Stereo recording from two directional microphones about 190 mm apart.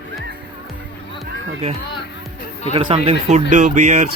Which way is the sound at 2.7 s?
30° right (ahead or behind).